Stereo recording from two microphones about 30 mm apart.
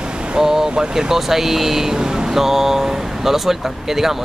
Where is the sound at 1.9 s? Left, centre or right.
Right.